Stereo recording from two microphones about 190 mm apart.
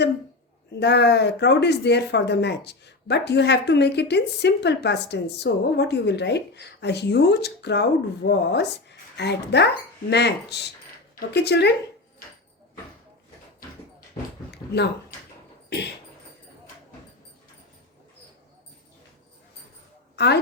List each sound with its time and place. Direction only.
0.8 s speech: 60° left (ahead or behind)
20.1 s a woman's voice: 60° left (ahead or behind)